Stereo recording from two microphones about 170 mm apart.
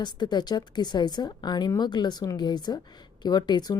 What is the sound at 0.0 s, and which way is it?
A woman's voice, 25° left (ahead or behind).